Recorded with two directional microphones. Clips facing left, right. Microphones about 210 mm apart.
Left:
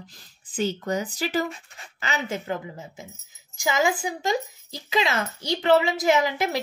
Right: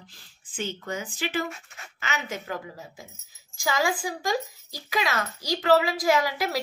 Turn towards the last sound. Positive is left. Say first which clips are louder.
# left 2 dB
turn(degrees=25)  # may be behind; listen again after turning